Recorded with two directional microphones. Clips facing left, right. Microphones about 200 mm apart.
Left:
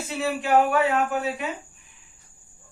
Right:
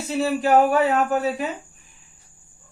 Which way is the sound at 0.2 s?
40° right (ahead or behind).